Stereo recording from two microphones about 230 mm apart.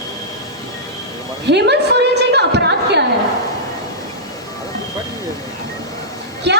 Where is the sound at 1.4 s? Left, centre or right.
Right.